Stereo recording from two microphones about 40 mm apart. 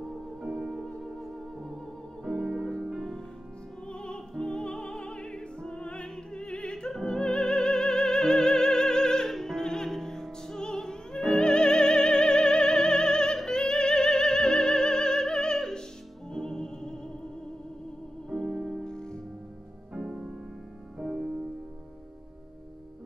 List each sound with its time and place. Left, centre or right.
0.8 s music: centre
2.3 s music: centre
3.0 s music: centre
3.9 s music: left
10.6 s opera: centre
11.2 s music: left
18.3 s music: centre
18.9 s music: centre
19.9 s music: right